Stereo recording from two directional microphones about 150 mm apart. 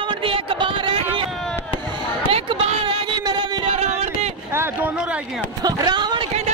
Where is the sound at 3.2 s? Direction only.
30° right (ahead or behind).